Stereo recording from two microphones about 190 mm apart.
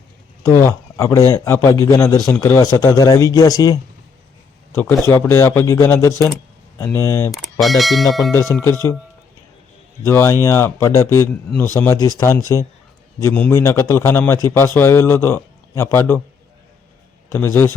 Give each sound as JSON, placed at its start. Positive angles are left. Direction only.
{"t": 0.4, "sound": "speech", "side_deg": 15}
{"t": 7.3, "sound": "speech", "side_deg": 0}
{"t": 8.3, "sound": "speech", "side_deg": 15}
{"t": 10.1, "sound": "speech", "side_deg": 15}
{"t": 17.3, "sound": "speech", "side_deg": 10}